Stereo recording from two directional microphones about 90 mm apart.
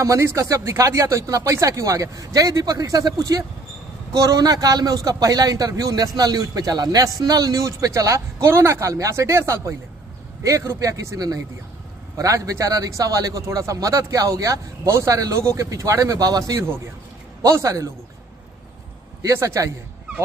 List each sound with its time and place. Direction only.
0.0 s a man's voice: 35° right (ahead or behind)
19.2 s a man's voice: 35° right (ahead or behind)